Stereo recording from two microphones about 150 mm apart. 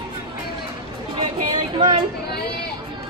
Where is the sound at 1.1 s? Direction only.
35° right (ahead or behind).